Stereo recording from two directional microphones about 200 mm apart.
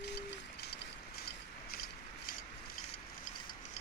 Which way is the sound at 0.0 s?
55° left (ahead or behind).